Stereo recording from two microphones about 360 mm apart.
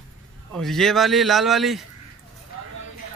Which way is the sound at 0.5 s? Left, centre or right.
Centre.